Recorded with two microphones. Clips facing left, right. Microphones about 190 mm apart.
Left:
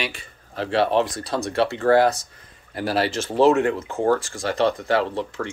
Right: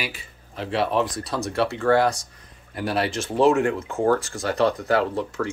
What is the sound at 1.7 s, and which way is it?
Speech, 35° left (ahead or behind).